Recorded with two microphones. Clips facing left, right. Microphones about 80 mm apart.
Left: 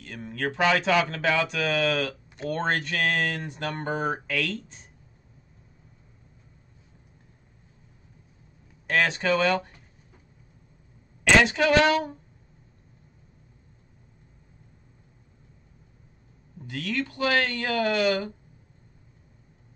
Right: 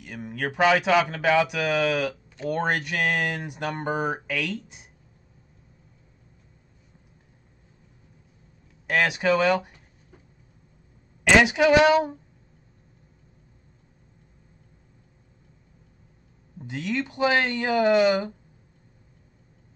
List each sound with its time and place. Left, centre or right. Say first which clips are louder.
0.0 s speech: even; centre
8.8 s speech: right 2 dB; centre
11.3 s speech: right 3 dB; centre
16.5 s speech: right 2 dB; centre